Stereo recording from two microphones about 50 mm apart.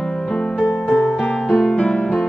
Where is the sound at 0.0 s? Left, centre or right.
Centre.